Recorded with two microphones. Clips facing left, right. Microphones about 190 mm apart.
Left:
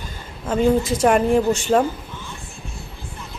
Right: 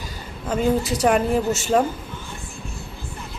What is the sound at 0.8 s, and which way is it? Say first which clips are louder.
Speech: left 3 dB; 35° right (ahead or behind).